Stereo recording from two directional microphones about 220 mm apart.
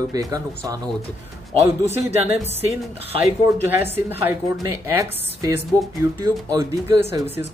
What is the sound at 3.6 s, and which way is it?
Speech, 10° right (ahead or behind).